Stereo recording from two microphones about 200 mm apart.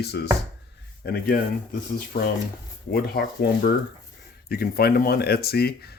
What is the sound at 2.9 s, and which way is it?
Speech, 50° left (ahead or behind).